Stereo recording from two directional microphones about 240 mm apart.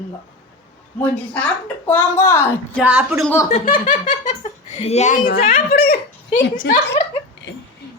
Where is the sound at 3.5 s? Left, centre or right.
Left.